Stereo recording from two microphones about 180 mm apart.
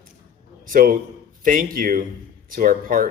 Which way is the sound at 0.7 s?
50° right (ahead or behind).